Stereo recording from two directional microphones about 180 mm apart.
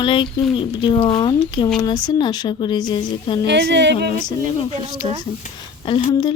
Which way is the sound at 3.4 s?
70° right (ahead or behind).